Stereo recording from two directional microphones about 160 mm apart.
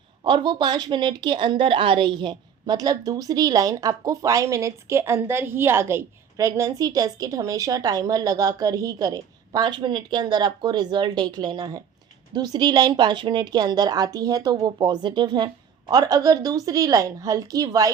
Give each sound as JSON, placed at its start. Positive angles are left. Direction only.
{"t": 0.3, "sound": "a woman's voice", "side_deg": -30}